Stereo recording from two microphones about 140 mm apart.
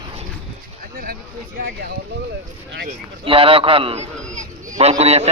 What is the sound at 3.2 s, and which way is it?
A man's voice, 40° right (ahead or behind).